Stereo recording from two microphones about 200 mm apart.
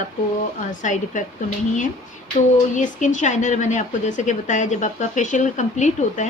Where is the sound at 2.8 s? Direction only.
40° left (ahead or behind).